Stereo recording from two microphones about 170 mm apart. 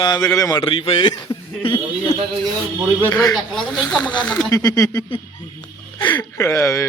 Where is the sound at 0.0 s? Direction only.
25° left (ahead or behind).